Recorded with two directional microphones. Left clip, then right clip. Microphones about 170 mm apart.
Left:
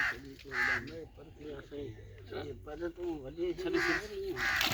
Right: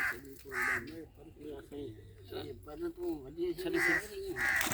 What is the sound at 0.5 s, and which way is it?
Speech, 25° right (ahead or behind).